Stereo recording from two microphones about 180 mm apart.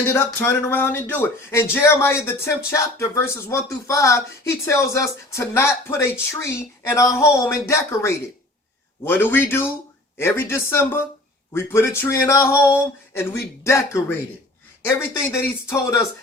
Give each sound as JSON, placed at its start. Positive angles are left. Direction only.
{"t": 0.0, "sound": "speech", "side_deg": 10}